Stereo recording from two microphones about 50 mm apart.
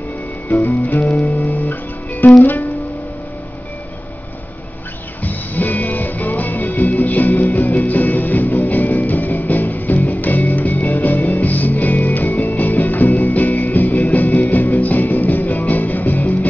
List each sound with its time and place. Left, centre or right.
0.5 s music: left
0.8 s music: left
5.2 s music: left